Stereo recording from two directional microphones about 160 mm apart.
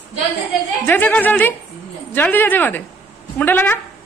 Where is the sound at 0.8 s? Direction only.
10° left (ahead or behind).